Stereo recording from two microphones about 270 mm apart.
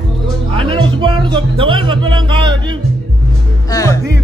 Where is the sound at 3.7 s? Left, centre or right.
Centre.